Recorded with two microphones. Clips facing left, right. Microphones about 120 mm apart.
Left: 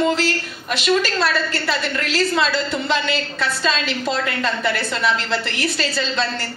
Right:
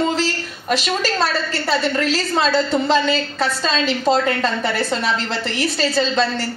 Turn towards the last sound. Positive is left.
turn(degrees=-35)  # may be behind; listen again after turning